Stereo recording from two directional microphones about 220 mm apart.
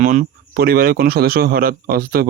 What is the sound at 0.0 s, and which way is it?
Speech, 35° right (ahead or behind).